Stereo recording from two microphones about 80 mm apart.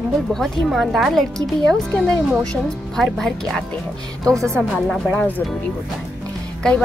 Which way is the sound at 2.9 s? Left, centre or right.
Centre.